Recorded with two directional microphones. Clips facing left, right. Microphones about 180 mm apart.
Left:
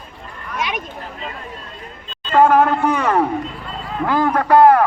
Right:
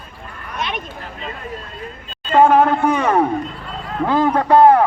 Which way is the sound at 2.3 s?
20° right (ahead or behind).